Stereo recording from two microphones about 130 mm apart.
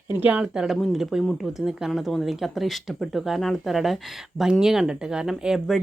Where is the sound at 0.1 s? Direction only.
15° right (ahead or behind).